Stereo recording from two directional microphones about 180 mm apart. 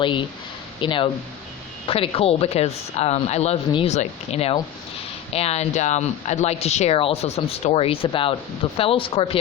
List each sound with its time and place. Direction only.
0.0 s speech: 25° left (ahead or behind)